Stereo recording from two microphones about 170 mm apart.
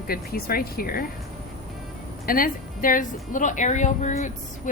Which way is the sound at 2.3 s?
55° left (ahead or behind).